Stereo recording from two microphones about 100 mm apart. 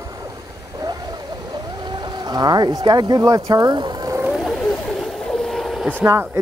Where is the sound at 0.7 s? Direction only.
45° right (ahead or behind).